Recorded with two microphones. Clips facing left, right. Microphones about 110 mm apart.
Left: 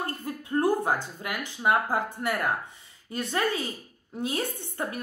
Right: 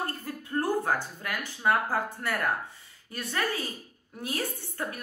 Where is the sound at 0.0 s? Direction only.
15° left (ahead or behind).